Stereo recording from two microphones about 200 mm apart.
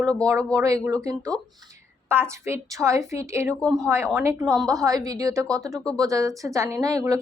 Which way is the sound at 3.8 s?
15° right (ahead or behind).